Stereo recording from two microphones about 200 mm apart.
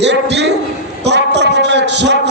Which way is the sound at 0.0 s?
60° right (ahead or behind).